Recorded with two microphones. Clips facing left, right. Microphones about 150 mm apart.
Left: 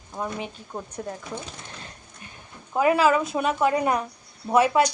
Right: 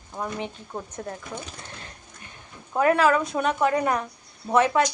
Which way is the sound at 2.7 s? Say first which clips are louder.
Even; 5° left (ahead or behind).